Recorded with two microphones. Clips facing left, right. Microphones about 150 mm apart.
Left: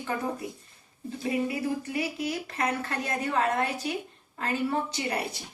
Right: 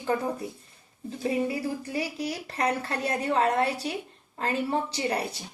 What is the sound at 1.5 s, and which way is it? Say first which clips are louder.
Speech: even; 35° right (ahead or behind).